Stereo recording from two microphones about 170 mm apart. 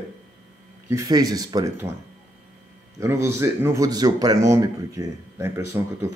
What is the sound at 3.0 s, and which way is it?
Speech, 15° right (ahead or behind).